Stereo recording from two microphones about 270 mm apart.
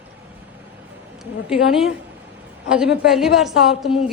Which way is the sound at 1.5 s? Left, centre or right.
Centre.